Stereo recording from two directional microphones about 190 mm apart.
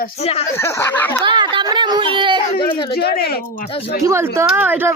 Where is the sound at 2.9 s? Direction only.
55° left (ahead or behind).